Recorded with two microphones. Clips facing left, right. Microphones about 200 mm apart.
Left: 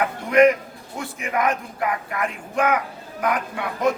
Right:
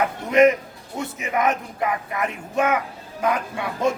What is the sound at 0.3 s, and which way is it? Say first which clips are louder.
Speech: even; 25° right (ahead or behind).